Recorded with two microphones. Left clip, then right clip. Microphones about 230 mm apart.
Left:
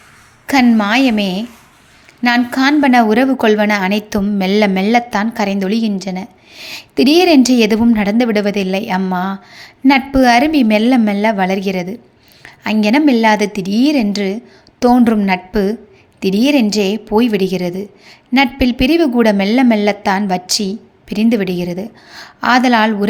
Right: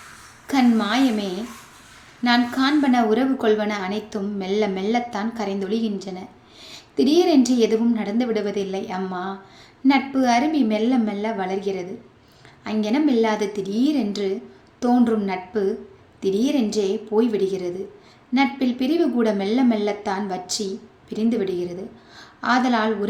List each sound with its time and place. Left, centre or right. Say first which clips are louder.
0.4 s a woman's voice: left 8 dB; left